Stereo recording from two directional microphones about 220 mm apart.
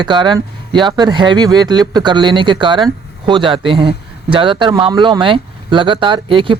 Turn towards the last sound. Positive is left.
turn(degrees=-20)  # may be behind; listen again after turning